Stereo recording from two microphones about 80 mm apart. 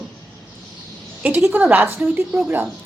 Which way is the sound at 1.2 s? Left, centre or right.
Right.